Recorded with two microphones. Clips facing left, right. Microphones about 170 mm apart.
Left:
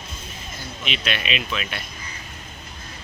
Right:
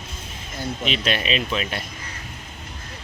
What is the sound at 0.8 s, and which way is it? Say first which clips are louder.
Speech: right 3 dB; 35° right (ahead or behind).